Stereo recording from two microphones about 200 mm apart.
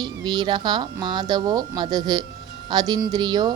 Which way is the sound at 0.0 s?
20° right (ahead or behind).